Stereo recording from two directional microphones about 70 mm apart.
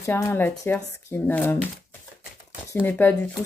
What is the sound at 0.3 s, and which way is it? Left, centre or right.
Speech, left.